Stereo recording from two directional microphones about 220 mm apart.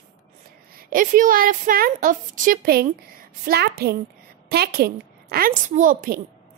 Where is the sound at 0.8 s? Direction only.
40° right (ahead or behind).